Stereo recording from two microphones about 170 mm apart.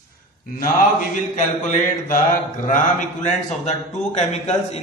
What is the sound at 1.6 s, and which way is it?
Speech, 50° left (ahead or behind).